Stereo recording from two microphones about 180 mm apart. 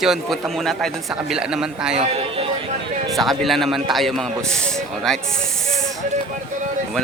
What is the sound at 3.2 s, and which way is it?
A man's voice, centre (ahead or behind).